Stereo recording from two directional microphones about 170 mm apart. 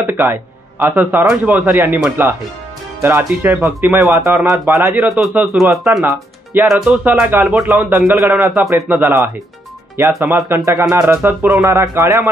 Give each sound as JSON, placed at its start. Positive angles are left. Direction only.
{"t": 0.0, "sound": "a man's voice", "side_deg": -10}
{"t": 5.0, "sound": "speech", "side_deg": -5}